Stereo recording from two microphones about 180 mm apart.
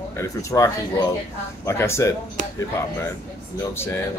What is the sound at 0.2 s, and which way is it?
Speech, 15° left (ahead or behind).